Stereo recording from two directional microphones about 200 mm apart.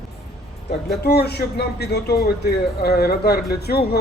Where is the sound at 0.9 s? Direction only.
55° left (ahead or behind).